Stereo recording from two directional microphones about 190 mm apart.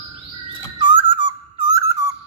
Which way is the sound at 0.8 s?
25° right (ahead or behind).